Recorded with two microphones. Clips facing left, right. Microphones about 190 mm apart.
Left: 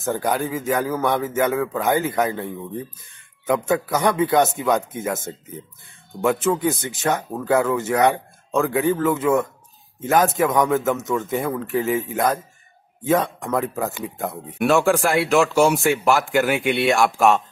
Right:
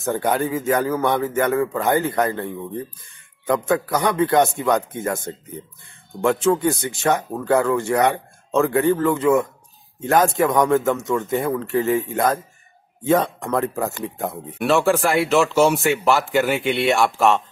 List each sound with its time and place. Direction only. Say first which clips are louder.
0.0 s a man's voice: right 2 dB; centre (ahead or behind)